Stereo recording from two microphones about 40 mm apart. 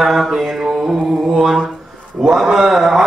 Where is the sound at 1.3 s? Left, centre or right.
Centre.